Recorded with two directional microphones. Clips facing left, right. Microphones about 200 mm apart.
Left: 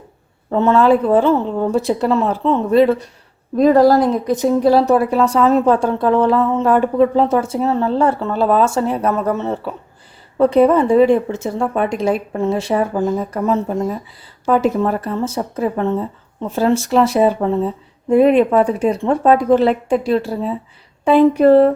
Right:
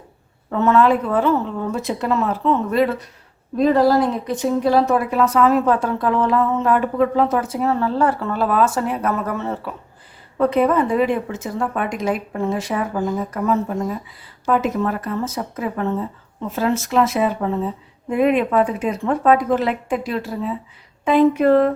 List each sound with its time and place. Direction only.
0.5 s a woman's voice: 30° left (ahead or behind)
3.6 s a woman's voice: 40° left (ahead or behind)